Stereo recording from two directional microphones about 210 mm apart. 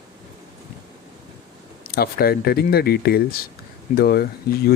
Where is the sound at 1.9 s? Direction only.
45° left (ahead or behind).